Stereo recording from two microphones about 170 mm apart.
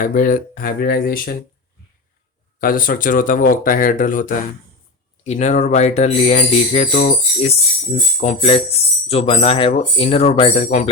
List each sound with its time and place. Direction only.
0.0 s speech: 50° left (ahead or behind)
2.6 s speech: 55° left (ahead or behind); by 10.8 s 40° left (ahead or behind)